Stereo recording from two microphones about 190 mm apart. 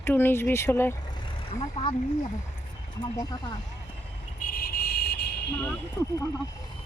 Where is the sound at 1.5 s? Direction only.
30° left (ahead or behind).